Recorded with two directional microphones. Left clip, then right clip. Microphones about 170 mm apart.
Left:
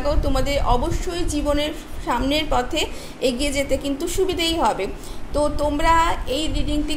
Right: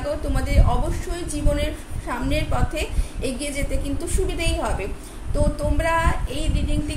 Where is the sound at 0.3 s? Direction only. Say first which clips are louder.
Left 5 dB; 40° left (ahead or behind).